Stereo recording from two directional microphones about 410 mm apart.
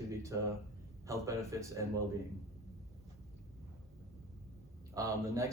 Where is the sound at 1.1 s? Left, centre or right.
Centre.